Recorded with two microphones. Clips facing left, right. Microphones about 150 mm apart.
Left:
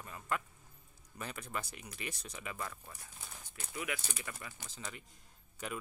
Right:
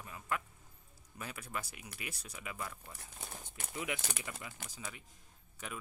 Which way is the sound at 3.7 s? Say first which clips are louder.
Right 1 dB; 20° right (ahead or behind).